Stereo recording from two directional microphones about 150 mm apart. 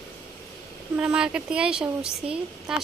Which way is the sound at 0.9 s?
5° right (ahead or behind).